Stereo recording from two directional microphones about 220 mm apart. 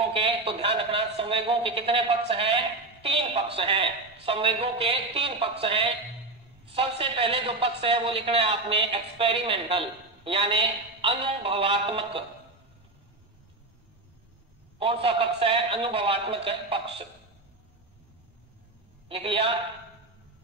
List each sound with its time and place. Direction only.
0.0 s a man's voice: 25° right (ahead or behind)
14.8 s a man's voice: 25° right (ahead or behind)
19.0 s a man's voice: 25° right (ahead or behind)